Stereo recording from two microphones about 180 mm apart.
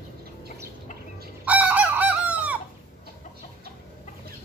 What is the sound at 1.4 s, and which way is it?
Chicken, 10° right (ahead or behind).